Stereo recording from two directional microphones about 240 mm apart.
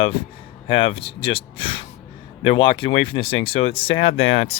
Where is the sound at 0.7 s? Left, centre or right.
Left.